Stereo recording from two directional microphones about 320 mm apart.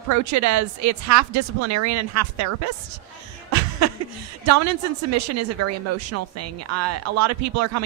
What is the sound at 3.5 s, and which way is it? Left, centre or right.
Chuckle, right.